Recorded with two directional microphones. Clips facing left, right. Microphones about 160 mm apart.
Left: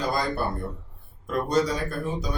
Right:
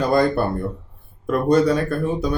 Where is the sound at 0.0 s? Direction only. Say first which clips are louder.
Right 9 dB; 60° right (ahead or behind).